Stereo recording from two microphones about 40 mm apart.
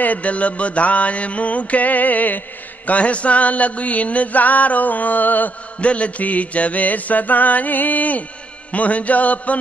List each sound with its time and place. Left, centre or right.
0.0 s mantra: left
2.9 s mantra: left
5.8 s mantra: left